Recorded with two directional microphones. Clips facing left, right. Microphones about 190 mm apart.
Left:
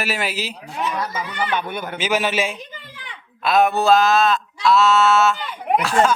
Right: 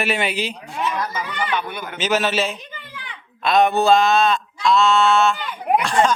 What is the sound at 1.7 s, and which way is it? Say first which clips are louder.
Speech: left 3 dB; 45° left (ahead or behind).